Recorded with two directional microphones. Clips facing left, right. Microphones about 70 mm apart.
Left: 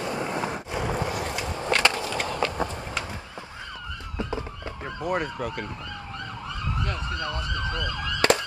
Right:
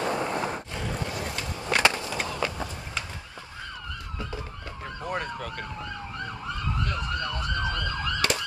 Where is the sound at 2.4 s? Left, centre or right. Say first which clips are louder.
Left 3 dB; centre.